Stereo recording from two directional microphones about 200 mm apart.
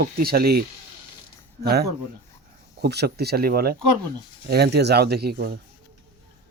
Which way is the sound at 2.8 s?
55° right (ahead or behind).